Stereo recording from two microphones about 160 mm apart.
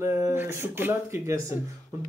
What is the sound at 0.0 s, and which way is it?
Speech, 15° right (ahead or behind).